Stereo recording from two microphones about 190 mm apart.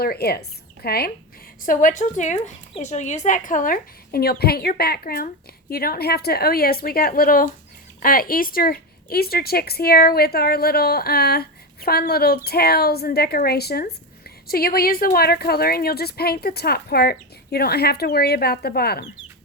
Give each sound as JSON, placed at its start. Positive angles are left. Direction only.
{"t": 0.0, "sound": "a woman's voice", "side_deg": 55}
{"t": 1.6, "sound": "a woman's voice", "side_deg": 45}